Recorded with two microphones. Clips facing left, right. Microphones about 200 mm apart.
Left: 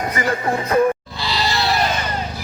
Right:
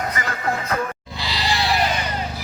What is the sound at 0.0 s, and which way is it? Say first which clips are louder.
Music: left 4 dB; 30° left (ahead or behind).